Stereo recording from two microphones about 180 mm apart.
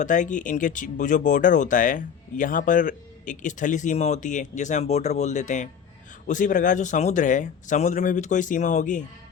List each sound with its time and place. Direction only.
0.0 s speech: 45° left (ahead or behind)